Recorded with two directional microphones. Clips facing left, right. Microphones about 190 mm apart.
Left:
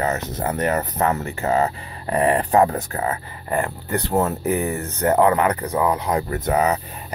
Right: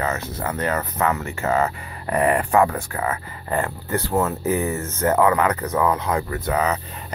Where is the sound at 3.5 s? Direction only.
15° left (ahead or behind).